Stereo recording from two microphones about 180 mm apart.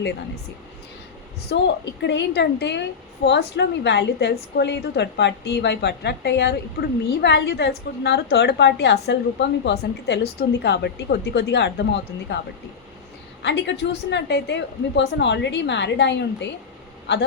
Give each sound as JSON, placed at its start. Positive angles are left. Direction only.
{"t": 1.5, "sound": "a woman's voice", "side_deg": 70}
{"t": 13.4, "sound": "a woman's voice", "side_deg": 75}